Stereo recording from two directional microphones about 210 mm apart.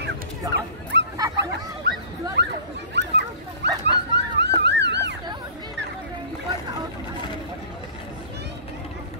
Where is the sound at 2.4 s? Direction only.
55° right (ahead or behind).